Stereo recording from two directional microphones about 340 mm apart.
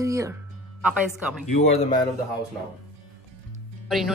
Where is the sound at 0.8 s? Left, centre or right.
Centre.